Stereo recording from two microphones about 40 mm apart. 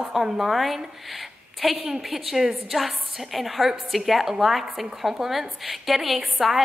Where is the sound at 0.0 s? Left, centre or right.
Centre.